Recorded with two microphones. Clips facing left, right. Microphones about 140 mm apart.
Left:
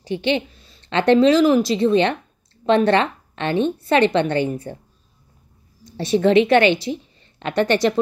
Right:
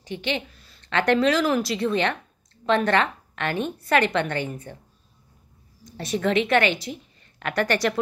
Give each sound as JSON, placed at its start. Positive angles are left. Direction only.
{"t": 0.0, "sound": "a woman's voice", "side_deg": 30}
{"t": 5.9, "sound": "a woman's voice", "side_deg": 30}